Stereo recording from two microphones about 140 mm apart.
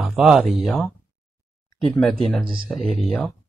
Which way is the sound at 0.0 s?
5° right (ahead or behind).